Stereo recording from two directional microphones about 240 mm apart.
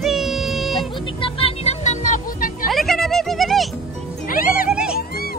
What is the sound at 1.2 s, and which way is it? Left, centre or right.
Music, left.